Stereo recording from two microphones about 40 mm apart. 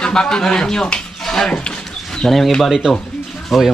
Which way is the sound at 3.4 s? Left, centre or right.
Centre.